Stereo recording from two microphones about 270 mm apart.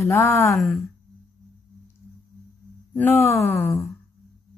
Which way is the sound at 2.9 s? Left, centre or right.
Centre.